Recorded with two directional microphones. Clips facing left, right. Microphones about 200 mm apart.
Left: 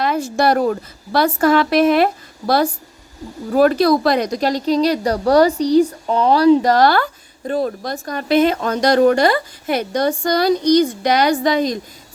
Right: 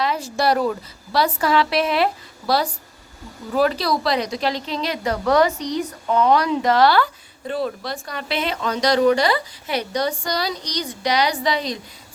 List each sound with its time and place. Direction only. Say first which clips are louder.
0.0 s a woman's voice: left 4 dB; 50° left (ahead or behind)
3.5 s a woman's voice: left 7 dB; 50° left (ahead or behind)